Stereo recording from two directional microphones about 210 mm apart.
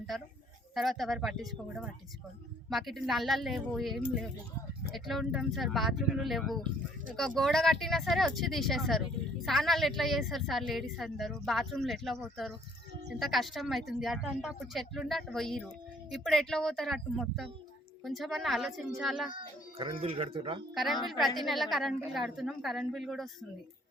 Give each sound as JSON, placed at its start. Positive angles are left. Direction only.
{"t": 0.7, "sound": "a woman's voice", "side_deg": 0}
{"t": 19.3, "sound": "speech", "side_deg": -25}
{"t": 20.7, "sound": "a woman's voice", "side_deg": 0}